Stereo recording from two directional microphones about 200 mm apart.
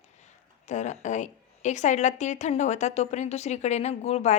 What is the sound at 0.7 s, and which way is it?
A woman's voice, 35° left (ahead or behind).